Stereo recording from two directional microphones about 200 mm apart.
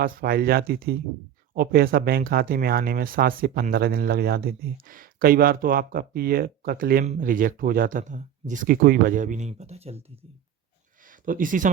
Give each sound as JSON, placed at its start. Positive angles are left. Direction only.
{"t": 0.0, "sound": "speech", "side_deg": -50}
{"t": 11.0, "sound": "speech", "side_deg": -40}